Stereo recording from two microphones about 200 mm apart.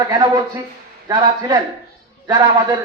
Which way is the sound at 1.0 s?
20° right (ahead or behind).